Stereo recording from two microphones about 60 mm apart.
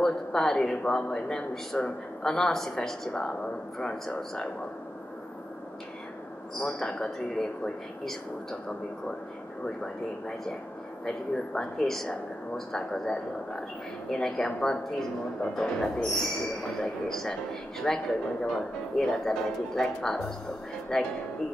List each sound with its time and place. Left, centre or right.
0.0 s a man's voice: centre
6.6 s a man's voice: centre
11.1 s a man's voice: centre